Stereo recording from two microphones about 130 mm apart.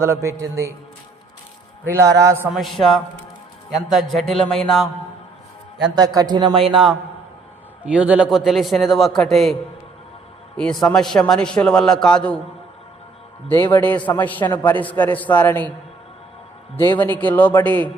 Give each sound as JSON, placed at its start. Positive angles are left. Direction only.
{"t": 0.0, "sound": "a man's voice", "side_deg": -20}
{"t": 1.8, "sound": "a man's voice", "side_deg": -20}
{"t": 2.5, "sound": "a man's voice", "side_deg": 0}
{"t": 6.3, "sound": "speech", "side_deg": -40}
{"t": 7.9, "sound": "a man's voice", "side_deg": -10}
{"t": 10.6, "sound": "a man's voice", "side_deg": 5}
{"t": 13.7, "sound": "a man's voice", "side_deg": 15}
{"t": 17.0, "sound": "a man's voice", "side_deg": 15}